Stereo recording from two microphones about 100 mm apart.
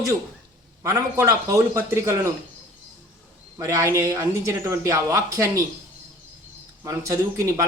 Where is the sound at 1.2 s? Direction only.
30° right (ahead or behind).